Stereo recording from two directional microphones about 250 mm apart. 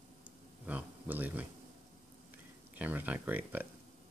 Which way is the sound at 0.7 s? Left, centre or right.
Centre.